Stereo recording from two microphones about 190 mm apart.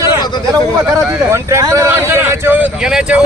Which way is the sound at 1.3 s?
15° right (ahead or behind).